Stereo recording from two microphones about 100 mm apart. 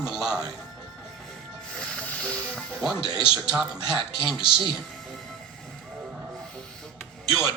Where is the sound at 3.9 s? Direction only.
45° right (ahead or behind).